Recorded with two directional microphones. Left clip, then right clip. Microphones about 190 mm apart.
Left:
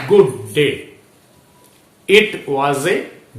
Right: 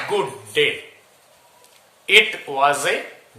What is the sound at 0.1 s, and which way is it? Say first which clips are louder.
Speech: left 12 dB; 20° right (ahead or behind).